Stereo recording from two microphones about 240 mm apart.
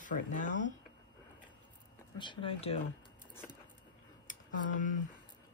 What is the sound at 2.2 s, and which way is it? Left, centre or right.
Speech, left.